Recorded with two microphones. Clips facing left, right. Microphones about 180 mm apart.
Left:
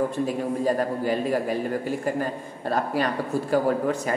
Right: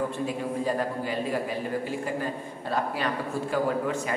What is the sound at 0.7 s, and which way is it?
Speech, 45° left (ahead or behind).